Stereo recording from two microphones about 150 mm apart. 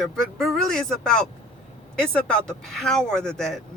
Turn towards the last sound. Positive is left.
turn(degrees=5)  # may be behind; listen again after turning